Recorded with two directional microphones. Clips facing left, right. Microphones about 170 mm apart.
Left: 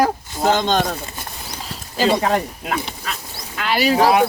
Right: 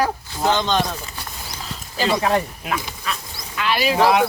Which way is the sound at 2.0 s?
40° left (ahead or behind).